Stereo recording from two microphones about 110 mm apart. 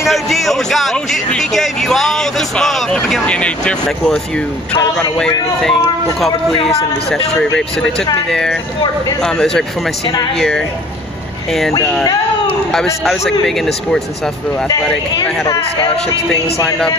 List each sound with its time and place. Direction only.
0.1 s a man's voice: centre (ahead or behind)
8.3 s a man's voice: 5° left (ahead or behind)
12.7 s a man's voice: centre (ahead or behind)